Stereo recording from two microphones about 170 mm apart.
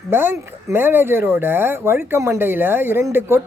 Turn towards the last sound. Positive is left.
turn(degrees=-15)  # may be behind; listen again after turning